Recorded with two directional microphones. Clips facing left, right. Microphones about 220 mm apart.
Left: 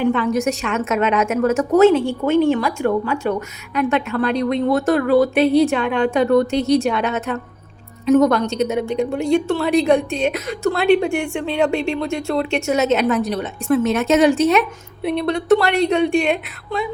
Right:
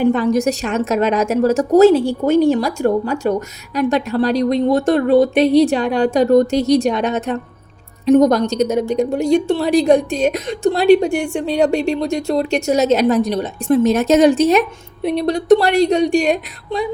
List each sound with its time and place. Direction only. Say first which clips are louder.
0.0 s a woman's voice: right 3 dB; 40° right (ahead or behind)